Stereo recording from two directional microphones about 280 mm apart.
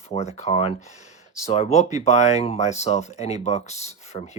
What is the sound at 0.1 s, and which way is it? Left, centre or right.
Speech, left.